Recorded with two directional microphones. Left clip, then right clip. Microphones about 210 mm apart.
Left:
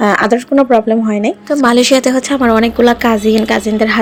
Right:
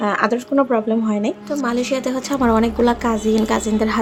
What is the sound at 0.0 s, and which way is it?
Speech, 30° left (ahead or behind).